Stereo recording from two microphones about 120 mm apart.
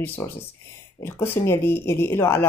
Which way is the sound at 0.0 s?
20° left (ahead or behind).